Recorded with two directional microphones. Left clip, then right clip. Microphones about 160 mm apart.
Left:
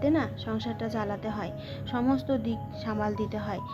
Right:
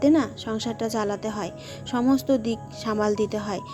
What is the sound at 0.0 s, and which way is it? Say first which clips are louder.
Speech: right 6 dB; 35° right (ahead or behind).